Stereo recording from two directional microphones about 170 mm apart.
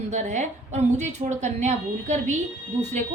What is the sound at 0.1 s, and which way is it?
A woman's voice, 45° right (ahead or behind).